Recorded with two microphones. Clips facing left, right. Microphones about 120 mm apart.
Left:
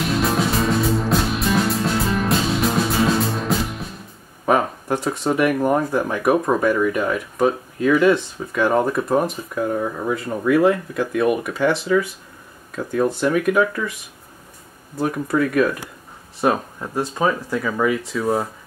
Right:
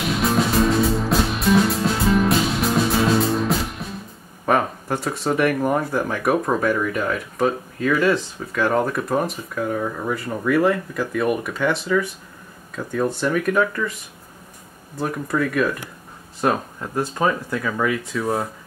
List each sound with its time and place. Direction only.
0.1 s music: centre (ahead or behind)
4.5 s a sound: 5° left (ahead or behind)
5.2 s speech: 5° left (ahead or behind)
11.1 s speech: 5° left (ahead or behind)
12.7 s speech: 5° left (ahead or behind)
15.0 s speech: 5° left (ahead or behind)